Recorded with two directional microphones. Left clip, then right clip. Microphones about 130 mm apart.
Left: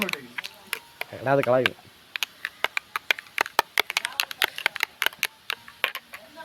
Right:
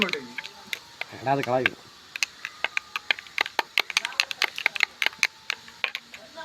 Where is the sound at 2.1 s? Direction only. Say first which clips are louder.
Left 1 dB; 25° left (ahead or behind).